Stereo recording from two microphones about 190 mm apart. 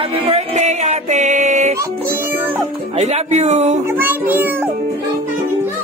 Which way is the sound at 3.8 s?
10° right (ahead or behind).